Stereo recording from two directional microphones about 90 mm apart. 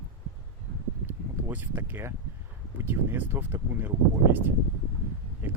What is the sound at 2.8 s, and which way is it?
Speech, 25° right (ahead or behind).